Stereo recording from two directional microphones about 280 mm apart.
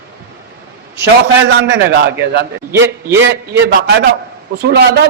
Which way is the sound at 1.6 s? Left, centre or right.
Right.